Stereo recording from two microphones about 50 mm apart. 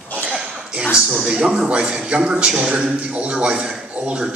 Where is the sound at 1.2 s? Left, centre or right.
Centre.